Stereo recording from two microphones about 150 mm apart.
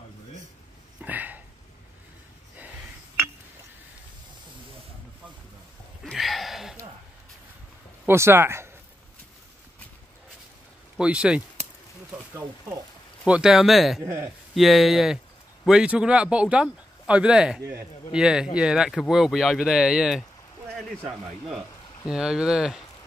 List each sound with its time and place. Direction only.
1.0 s a sound: 10° right (ahead or behind)
6.0 s a sound: centre (ahead or behind)
8.0 s speech: 15° right (ahead or behind)
11.0 s speech: 5° right (ahead or behind)
12.1 s a sound: 5° right (ahead or behind)
13.2 s speech: 5° right (ahead or behind)
14.0 s speech: 15° right (ahead or behind)
14.5 s speech: centre (ahead or behind)
22.1 s speech: 5° right (ahead or behind)